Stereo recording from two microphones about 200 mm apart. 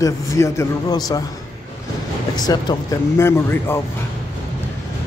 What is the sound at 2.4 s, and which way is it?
A man's voice, 20° left (ahead or behind).